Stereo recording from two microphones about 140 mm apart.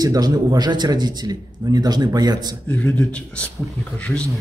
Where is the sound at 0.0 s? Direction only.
30° right (ahead or behind).